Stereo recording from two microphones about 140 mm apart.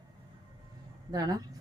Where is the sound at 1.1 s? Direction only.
25° right (ahead or behind).